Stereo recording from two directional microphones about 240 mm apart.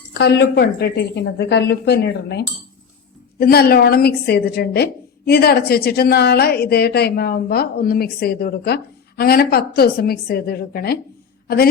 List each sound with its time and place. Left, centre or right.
0.1 s a woman's voice: left